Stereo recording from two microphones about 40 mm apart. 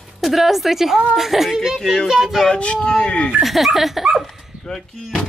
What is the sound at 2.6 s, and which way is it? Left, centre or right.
Speech, left.